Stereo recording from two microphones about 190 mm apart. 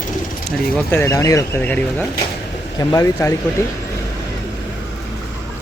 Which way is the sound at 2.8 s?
20° left (ahead or behind).